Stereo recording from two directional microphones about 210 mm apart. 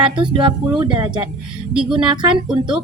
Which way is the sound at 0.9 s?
20° right (ahead or behind).